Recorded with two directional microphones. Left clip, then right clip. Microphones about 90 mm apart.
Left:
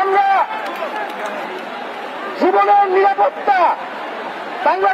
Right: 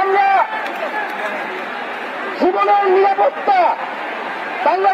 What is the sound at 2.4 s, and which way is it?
A man's voice, 50° left (ahead or behind).